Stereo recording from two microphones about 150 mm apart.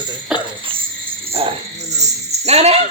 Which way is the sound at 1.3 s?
40° right (ahead or behind).